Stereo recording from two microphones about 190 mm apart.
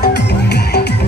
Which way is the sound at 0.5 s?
60° left (ahead or behind).